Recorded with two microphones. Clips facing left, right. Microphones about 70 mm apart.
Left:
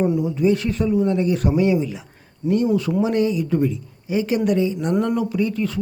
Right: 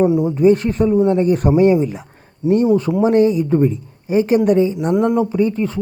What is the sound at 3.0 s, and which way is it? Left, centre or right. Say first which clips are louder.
Speech: right 6 dB; right.